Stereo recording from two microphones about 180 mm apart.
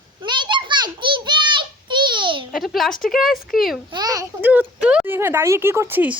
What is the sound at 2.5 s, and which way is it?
Speech, centre (ahead or behind).